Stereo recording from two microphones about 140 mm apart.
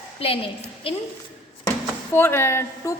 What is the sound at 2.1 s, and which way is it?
Speech, 15° left (ahead or behind).